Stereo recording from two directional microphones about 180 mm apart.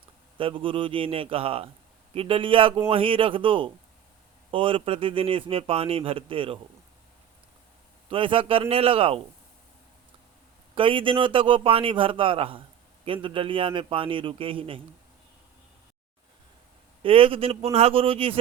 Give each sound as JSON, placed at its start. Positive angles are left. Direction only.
{"t": 0.3, "sound": "a man's voice", "side_deg": -30}
{"t": 8.1, "sound": "speech", "side_deg": -30}
{"t": 10.8, "sound": "a man's voice", "side_deg": -30}
{"t": 17.0, "sound": "speech", "side_deg": -30}